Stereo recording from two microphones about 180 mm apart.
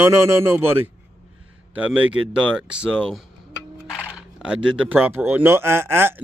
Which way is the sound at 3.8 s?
10° left (ahead or behind).